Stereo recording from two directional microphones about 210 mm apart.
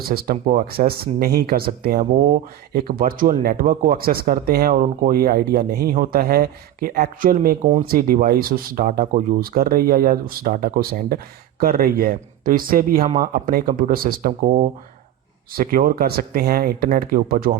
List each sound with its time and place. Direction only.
0.1 s speech: 45° right (ahead or behind)